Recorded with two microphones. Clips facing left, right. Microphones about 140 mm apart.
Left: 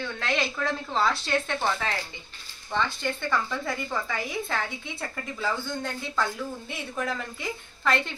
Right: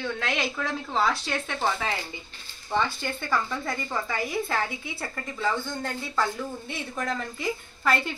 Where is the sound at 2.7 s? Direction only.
5° right (ahead or behind).